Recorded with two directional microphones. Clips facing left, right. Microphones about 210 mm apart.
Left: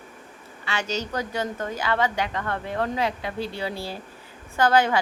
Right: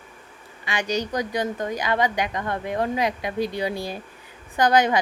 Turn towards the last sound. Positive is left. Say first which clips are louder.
# right 1 dB
turn(degrees=-15)  # may be behind; listen again after turning